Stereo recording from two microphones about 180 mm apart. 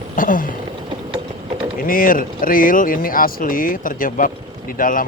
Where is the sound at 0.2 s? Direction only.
50° left (ahead or behind).